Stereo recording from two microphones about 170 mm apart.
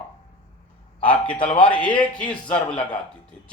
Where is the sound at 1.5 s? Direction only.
30° left (ahead or behind).